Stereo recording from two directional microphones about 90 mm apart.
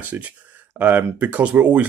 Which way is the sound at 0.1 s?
25° right (ahead or behind).